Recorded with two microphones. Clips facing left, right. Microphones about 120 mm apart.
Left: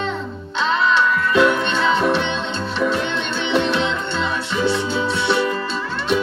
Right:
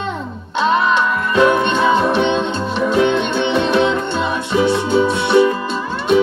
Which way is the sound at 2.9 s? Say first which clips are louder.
Right 8 dB; 55° right (ahead or behind).